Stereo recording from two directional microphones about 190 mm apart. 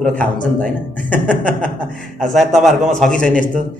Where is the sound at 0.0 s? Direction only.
5° left (ahead or behind).